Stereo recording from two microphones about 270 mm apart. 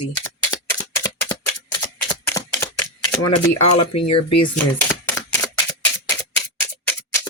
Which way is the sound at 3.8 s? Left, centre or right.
Left.